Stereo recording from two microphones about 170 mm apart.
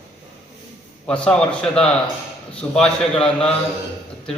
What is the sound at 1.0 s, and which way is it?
A man's voice, 5° left (ahead or behind).